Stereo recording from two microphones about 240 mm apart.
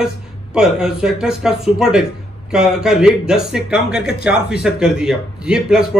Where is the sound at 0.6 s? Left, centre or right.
Centre.